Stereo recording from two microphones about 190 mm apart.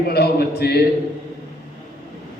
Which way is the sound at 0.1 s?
55° left (ahead or behind).